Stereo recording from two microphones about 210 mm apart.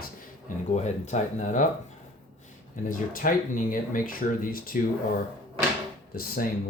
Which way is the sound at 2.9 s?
40° left (ahead or behind).